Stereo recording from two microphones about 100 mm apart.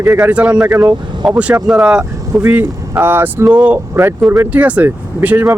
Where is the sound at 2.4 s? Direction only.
20° right (ahead or behind).